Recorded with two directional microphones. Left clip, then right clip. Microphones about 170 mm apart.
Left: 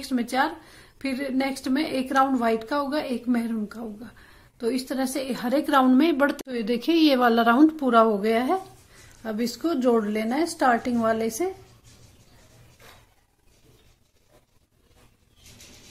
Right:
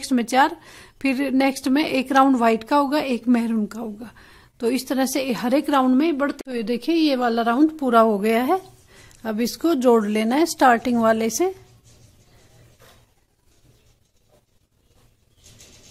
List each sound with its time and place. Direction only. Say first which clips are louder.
0.0 s a woman's voice: right 6 dB; 40° right (ahead or behind); by 6.4 s 15° right (ahead or behind)
6.4 s a woman's voice: right 1 dB; 30° right (ahead or behind)